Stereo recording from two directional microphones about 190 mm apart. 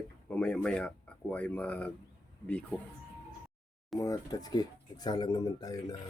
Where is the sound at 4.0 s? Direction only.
20° left (ahead or behind).